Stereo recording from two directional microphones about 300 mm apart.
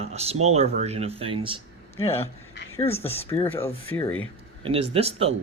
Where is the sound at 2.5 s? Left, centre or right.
Left.